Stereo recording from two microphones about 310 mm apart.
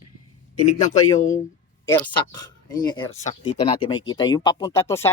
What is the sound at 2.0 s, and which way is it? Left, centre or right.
Speech, centre.